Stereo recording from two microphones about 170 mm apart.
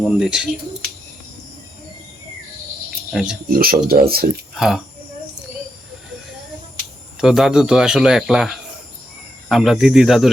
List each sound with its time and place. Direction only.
0.2 s speech: 5° right (ahead or behind)
3.1 s speech: centre (ahead or behind)
3.5 s speech: 60° right (ahead or behind)
4.5 s speech: centre (ahead or behind)
7.2 s speech: centre (ahead or behind)